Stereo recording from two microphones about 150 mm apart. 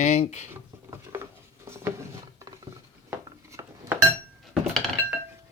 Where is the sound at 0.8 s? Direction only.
20° right (ahead or behind).